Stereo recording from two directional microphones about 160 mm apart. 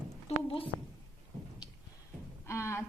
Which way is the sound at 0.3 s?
35° left (ahead or behind).